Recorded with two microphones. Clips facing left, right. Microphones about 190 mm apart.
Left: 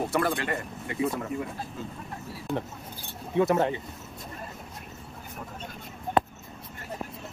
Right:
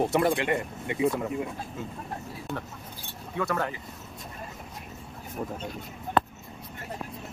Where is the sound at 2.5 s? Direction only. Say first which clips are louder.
Left 5 dB; centre (ahead or behind).